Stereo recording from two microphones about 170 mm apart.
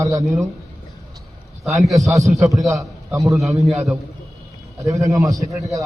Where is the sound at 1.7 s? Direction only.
Centre (ahead or behind).